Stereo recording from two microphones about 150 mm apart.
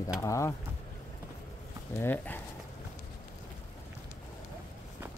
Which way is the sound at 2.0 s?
15° left (ahead or behind).